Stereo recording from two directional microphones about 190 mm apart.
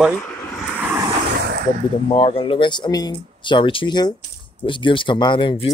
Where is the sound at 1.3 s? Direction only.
55° right (ahead or behind).